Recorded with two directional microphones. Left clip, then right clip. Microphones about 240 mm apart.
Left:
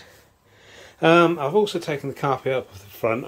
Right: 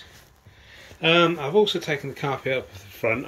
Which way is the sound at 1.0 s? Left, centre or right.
Centre.